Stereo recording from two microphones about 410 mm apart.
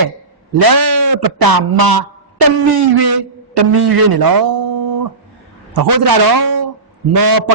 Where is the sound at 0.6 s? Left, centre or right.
Right.